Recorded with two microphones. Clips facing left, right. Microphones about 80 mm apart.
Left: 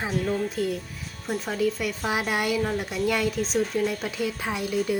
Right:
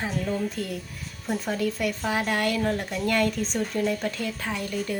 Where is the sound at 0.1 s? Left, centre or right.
Left.